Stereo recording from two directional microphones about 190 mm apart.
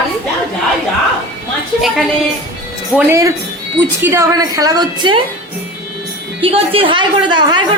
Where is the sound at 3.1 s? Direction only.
15° right (ahead or behind).